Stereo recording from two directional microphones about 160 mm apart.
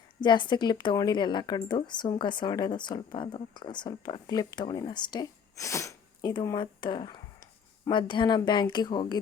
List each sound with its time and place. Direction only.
0.2 s speech: 30° left (ahead or behind)